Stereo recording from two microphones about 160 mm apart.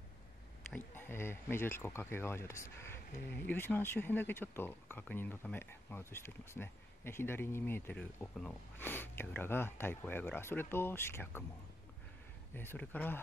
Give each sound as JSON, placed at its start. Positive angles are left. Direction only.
{"t": 0.7, "sound": "speech", "side_deg": 10}
{"t": 12.5, "sound": "speech", "side_deg": 10}